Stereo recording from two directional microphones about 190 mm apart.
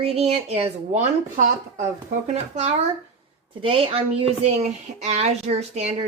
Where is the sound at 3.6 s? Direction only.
30° right (ahead or behind).